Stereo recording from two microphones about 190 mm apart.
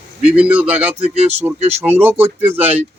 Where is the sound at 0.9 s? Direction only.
30° right (ahead or behind).